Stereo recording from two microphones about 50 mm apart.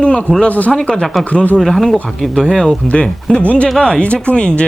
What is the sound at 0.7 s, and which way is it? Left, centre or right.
Speech, centre.